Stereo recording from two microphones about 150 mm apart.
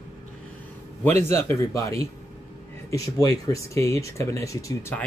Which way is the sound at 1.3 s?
15° left (ahead or behind).